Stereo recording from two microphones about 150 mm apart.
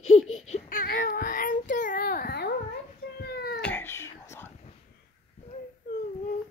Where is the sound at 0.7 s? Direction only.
65° left (ahead or behind); by 2.5 s 90° left.